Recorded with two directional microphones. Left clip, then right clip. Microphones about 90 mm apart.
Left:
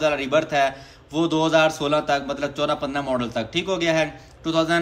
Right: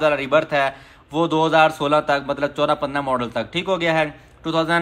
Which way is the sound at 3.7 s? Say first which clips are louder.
Right 2 dB; 20° left (ahead or behind).